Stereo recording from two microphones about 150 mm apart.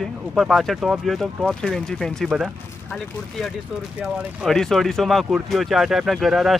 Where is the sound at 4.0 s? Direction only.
Centre (ahead or behind).